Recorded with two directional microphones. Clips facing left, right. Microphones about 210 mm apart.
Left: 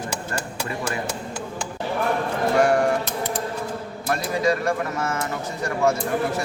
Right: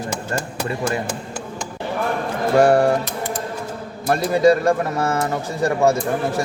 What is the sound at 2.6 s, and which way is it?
Speech, 35° right (ahead or behind).